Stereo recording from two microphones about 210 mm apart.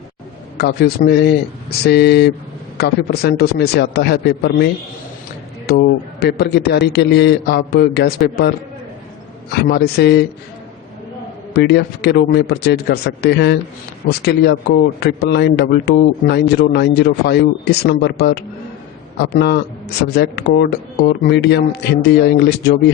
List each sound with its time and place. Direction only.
0.5 s a man's voice: 50° left (ahead or behind)
9.5 s a man's voice: 50° left (ahead or behind)
11.5 s a man's voice: 55° left (ahead or behind)